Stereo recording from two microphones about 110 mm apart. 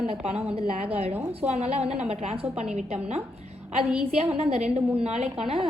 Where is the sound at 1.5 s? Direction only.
65° right (ahead or behind).